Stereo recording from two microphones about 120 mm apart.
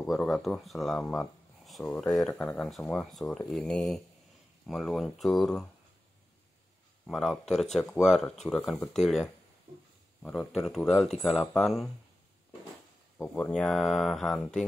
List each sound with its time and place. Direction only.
0.0 s speech: centre (ahead or behind)
7.1 s speech: centre (ahead or behind)
13.2 s speech: 10° left (ahead or behind)